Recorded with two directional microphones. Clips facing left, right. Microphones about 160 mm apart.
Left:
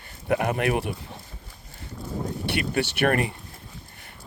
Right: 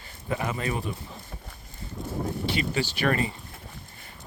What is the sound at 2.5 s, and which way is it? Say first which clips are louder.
Speech: left 5 dB; 65° left (ahead or behind).